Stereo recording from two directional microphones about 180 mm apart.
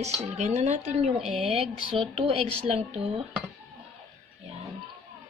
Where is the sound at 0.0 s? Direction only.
40° right (ahead or behind).